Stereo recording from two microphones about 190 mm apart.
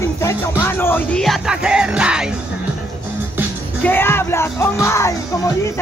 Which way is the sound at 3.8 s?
10° left (ahead or behind).